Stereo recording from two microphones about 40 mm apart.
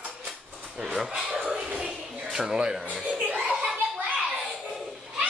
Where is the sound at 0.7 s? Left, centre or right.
Centre.